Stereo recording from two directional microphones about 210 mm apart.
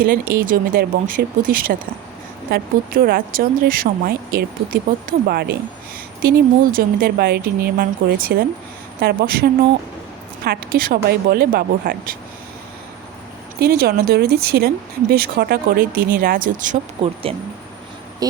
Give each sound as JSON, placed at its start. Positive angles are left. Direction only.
{"t": 0.0, "sound": "speech", "side_deg": -40}
{"t": 13.6, "sound": "speech", "side_deg": -50}
{"t": 18.2, "sound": "speech", "side_deg": -20}